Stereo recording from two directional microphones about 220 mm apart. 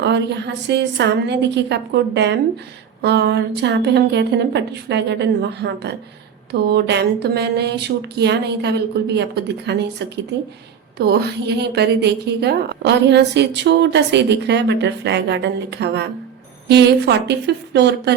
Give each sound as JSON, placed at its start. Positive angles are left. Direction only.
{"t": 0.0, "sound": "a woman's voice", "side_deg": -50}
{"t": 10.9, "sound": "a woman's voice", "side_deg": -50}